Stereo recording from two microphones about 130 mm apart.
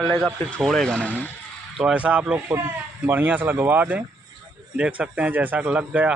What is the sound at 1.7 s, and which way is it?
A man's voice, 10° right (ahead or behind).